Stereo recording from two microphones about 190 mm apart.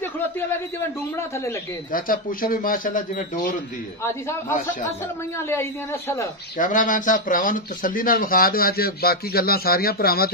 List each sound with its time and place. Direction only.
1.9 s speech: 45° left (ahead or behind)
4.0 s a man's voice: 15° left (ahead or behind)
6.6 s speech: 45° left (ahead or behind)